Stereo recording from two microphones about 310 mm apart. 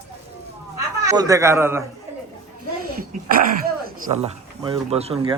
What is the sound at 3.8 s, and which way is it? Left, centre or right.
Speech, centre.